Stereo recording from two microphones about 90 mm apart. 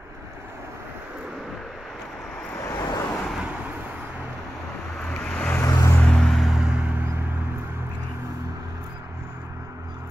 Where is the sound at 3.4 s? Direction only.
10° right (ahead or behind).